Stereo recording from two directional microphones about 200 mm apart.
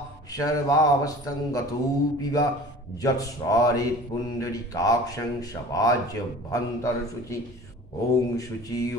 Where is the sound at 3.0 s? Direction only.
15° left (ahead or behind).